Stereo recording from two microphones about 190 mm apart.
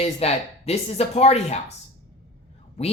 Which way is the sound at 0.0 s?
35° left (ahead or behind).